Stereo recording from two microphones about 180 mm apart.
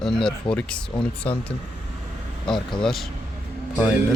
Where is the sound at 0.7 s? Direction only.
5° left (ahead or behind).